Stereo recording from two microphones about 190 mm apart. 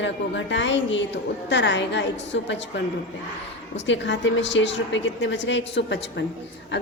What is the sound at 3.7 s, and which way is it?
A woman's voice, 70° left (ahead or behind).